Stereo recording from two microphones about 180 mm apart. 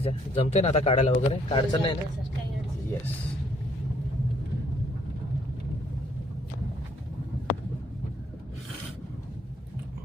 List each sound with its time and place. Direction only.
0.0 s speech: 35° left (ahead or behind)